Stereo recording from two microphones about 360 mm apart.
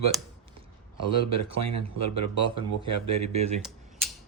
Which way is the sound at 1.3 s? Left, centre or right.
Right.